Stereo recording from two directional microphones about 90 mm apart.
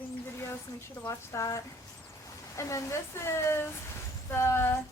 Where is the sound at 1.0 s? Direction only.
35° left (ahead or behind).